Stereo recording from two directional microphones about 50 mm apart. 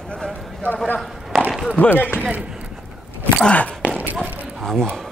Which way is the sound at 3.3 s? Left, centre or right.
Left.